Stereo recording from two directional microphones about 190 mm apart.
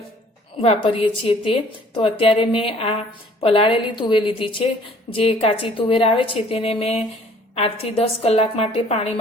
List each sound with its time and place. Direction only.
0.6 s a woman's voice: 30° left (ahead or behind)